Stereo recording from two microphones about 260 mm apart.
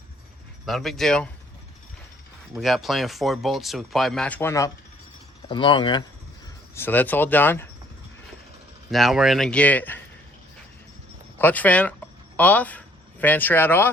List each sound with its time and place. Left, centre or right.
0.6 s speech: centre
2.6 s speech: centre
6.7 s speech: centre
8.9 s speech: centre
11.3 s speech: centre